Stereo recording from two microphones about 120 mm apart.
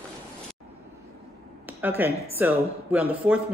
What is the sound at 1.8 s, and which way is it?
A woman's voice, 15° right (ahead or behind).